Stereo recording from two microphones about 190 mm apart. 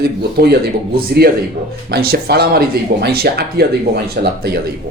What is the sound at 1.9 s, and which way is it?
Speech, 55° right (ahead or behind).